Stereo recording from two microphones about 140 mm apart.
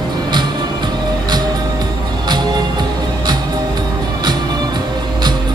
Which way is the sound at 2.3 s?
30° right (ahead or behind).